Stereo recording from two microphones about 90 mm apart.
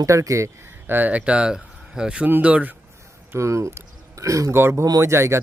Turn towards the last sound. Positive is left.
turn(degrees=-30)  # may be behind; listen again after turning